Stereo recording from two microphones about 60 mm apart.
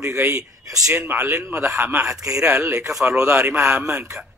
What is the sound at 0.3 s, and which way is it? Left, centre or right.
Speech, right.